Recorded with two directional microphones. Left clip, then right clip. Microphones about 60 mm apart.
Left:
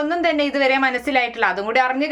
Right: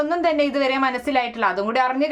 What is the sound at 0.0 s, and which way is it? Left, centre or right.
A woman's voice, right.